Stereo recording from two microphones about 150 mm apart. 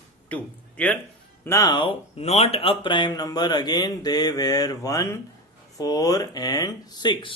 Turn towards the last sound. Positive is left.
turn(degrees=30)  # may be behind; listen again after turning